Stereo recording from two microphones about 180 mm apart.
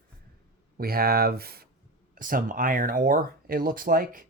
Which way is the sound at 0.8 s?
55° right (ahead or behind).